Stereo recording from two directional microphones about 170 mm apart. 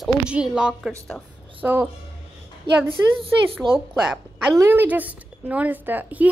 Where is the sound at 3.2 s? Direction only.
30° right (ahead or behind).